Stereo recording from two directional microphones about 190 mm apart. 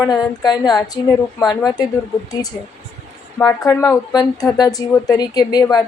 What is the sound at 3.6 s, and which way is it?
Speech, 15° left (ahead or behind).